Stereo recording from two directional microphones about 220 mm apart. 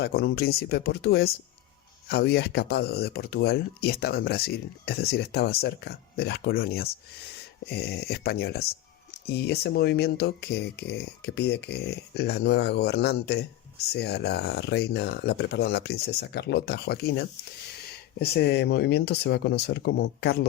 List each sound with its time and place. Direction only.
0.0 s speech: 45° left (ahead or behind)